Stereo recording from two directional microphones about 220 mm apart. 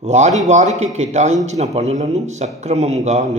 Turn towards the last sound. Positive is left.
turn(degrees=-30)  # may be behind; listen again after turning